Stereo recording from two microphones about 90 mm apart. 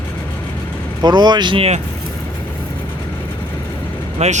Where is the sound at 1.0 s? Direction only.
55° right (ahead or behind).